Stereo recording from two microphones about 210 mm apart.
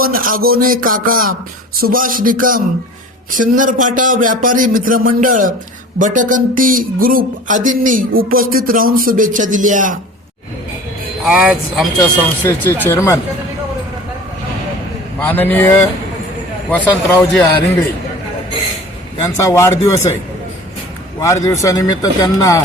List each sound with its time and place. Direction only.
0.0 s speech: 45° right (ahead or behind)
0.6 s a sound: 40° right (ahead or behind)
1.8 s speech: 40° right (ahead or behind)
11.3 s speech: 5° right (ahead or behind)
12.5 s speech: 10° left (ahead or behind)
15.2 s speech: 10° left (ahead or behind)
16.7 s speech: 10° left (ahead or behind)
19.4 s speech: 15° left (ahead or behind)
21.2 s speech: 15° left (ahead or behind)